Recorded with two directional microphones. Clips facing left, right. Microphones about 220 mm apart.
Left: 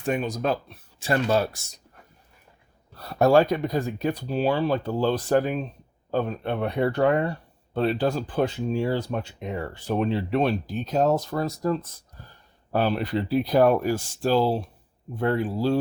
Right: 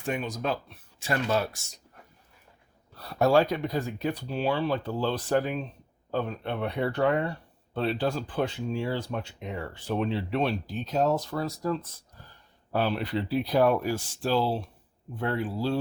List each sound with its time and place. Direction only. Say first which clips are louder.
0.1 s speech: left 5 dB; 40° left (ahead or behind)
3.0 s speech: left 4 dB; 45° left (ahead or behind)